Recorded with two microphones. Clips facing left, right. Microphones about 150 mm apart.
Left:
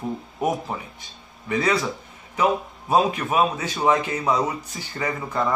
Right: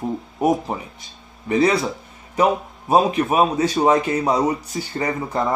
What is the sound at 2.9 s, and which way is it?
A man's voice, 30° right (ahead or behind).